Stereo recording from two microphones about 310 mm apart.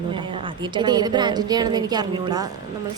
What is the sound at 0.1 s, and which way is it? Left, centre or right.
A woman's voice, centre.